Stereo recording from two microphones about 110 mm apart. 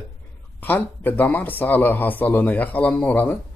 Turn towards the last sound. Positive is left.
turn(degrees=15)  # may be behind; listen again after turning